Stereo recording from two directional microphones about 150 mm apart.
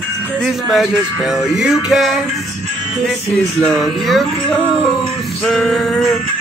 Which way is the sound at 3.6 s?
5° left (ahead or behind).